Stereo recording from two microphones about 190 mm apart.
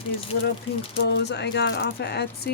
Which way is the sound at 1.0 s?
65° left (ahead or behind).